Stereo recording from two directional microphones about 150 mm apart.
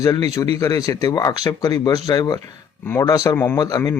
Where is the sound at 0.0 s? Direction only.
25° left (ahead or behind).